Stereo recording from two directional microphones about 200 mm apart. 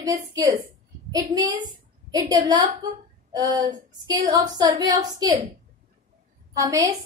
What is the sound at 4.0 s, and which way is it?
A woman's voice, 20° right (ahead or behind).